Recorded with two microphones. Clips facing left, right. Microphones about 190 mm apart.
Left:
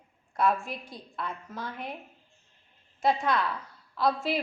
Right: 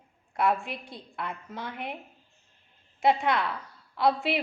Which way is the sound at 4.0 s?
65° right (ahead or behind).